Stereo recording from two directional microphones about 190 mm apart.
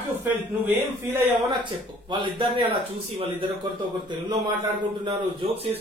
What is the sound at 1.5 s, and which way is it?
A woman's voice, 25° right (ahead or behind).